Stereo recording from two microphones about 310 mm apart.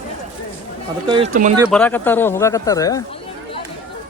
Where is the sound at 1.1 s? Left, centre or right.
Centre.